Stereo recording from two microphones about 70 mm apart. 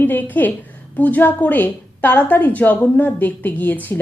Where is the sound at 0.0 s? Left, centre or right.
Left.